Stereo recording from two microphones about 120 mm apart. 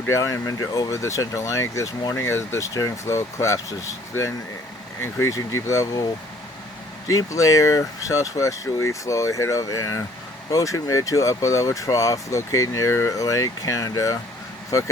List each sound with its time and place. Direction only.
0.1 s speech: 25° left (ahead or behind)
7.1 s speech: 30° left (ahead or behind)